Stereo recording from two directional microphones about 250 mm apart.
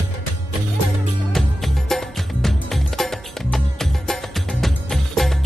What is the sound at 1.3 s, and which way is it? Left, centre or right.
Music, centre.